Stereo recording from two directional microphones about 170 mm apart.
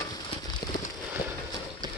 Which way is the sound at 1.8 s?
25° right (ahead or behind).